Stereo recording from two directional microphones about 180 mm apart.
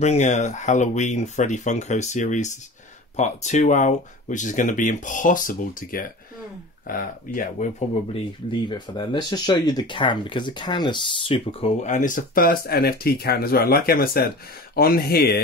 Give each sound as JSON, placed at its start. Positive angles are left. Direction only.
{"t": 0.0, "sound": "speech", "side_deg": 40}
{"t": 8.5, "sound": "speech", "side_deg": 25}
{"t": 11.8, "sound": "speech", "side_deg": 45}